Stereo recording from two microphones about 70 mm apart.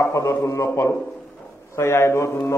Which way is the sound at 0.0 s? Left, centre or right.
Left.